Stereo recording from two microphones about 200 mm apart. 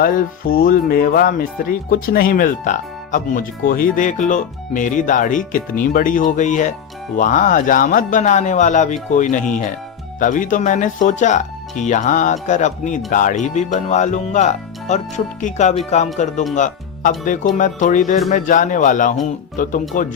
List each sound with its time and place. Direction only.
0.0 s speech: 45° left (ahead or behind)